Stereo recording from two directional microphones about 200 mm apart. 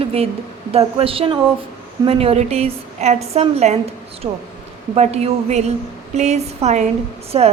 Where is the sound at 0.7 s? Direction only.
30° right (ahead or behind).